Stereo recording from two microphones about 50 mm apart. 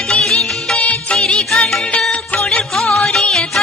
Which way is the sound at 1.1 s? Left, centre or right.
Centre.